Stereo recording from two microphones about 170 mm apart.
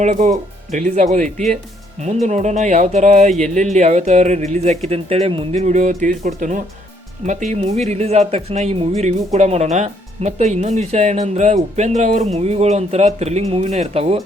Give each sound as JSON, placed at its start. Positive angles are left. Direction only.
{"t": 0.0, "sound": "speech", "side_deg": -45}